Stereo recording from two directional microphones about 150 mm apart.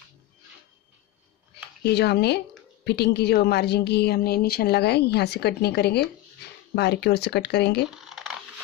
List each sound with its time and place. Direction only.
1.8 s a woman's voice: 90° left
8.0 s crumpling: centre (ahead or behind)